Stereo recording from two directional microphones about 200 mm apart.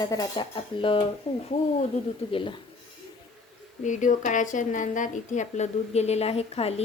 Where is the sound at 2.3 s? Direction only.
25° left (ahead or behind).